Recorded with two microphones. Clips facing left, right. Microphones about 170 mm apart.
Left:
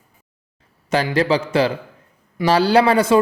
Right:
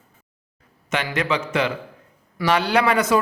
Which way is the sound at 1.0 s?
35° left (ahead or behind).